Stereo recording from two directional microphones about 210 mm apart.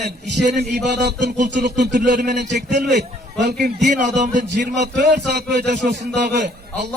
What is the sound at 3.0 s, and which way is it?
A man's voice, 50° right (ahead or behind).